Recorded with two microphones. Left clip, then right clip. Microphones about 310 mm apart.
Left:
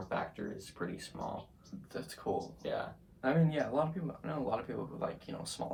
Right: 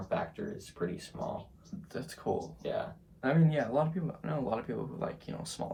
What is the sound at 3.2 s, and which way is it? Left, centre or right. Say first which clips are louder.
Speech: right 2 dB; right.